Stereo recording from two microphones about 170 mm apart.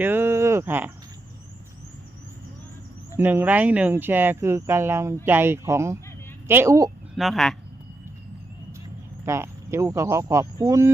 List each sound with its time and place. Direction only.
0.0 s cricket: 10° right (ahead or behind)
3.2 s speech: 10° right (ahead or behind)
7.2 s speech: centre (ahead or behind)
9.2 s speech: 15° right (ahead or behind)